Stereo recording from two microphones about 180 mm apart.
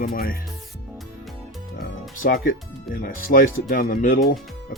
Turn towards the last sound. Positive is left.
turn(degrees=50)  # may be behind; listen again after turning